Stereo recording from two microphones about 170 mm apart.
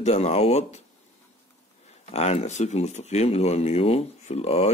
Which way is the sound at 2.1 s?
40° left (ahead or behind).